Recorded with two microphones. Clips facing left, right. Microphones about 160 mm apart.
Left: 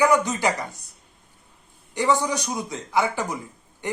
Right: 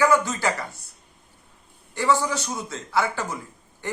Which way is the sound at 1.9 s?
15° left (ahead or behind).